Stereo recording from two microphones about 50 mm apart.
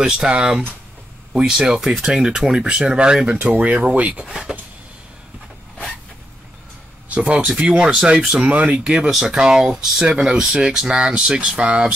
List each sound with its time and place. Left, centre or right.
0.0 s speech: centre
7.1 s speech: right